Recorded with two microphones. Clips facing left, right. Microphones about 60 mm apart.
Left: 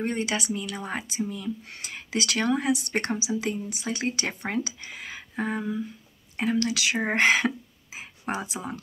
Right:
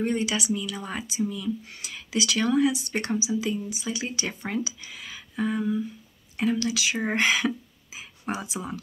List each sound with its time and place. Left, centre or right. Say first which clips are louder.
0.0 s speech: right 2 dB; left
5.6 s speech: right 3 dB; centre
6.3 s speech: even; left
7.2 s whispering: left 3 dB; left
8.5 s speech: right 1 dB; left